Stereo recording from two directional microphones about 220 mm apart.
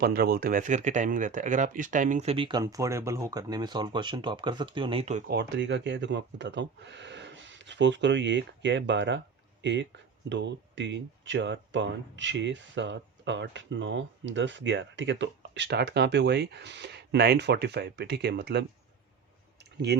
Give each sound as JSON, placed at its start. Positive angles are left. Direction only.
{"t": 0.0, "sound": "speech", "side_deg": -45}
{"t": 5.3, "sound": "speech", "side_deg": -50}